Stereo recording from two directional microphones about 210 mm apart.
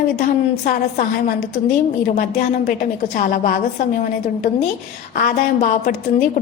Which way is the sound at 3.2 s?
40° left (ahead or behind).